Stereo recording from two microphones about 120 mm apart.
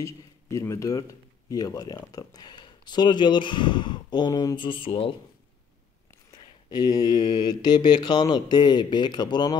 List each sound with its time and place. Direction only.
0.0 s speech: 25° left (ahead or behind); by 5.1 s 50° left (ahead or behind)
6.7 s speech: 35° left (ahead or behind)